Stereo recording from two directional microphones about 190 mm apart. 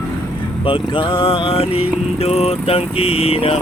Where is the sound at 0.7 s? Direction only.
25° left (ahead or behind).